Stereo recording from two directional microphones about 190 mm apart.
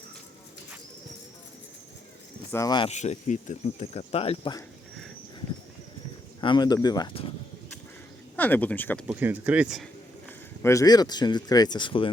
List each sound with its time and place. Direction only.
2.5 s speech: 20° left (ahead or behind)
2.9 s speech: 40° left (ahead or behind)
6.4 s speech: 25° left (ahead or behind)
8.4 s speech: 10° left (ahead or behind)
9.0 s speech: 10° right (ahead or behind)
10.2 s speech: 15° left (ahead or behind)